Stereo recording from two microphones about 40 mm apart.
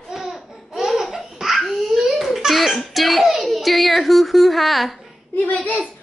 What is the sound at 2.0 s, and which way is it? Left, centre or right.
Crying, centre.